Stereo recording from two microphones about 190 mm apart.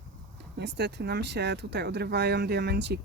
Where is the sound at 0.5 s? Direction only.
65° right (ahead or behind).